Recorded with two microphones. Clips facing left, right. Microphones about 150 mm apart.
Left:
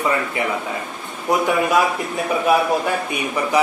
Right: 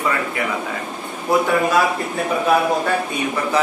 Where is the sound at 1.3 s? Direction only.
20° left (ahead or behind).